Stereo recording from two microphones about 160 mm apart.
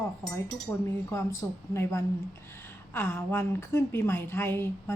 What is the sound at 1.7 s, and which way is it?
A woman's voice, 15° left (ahead or behind).